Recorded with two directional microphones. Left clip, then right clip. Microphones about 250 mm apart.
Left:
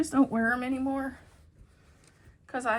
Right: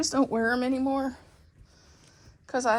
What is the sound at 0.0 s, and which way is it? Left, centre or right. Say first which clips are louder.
A woman's voice: right 1 dB; centre.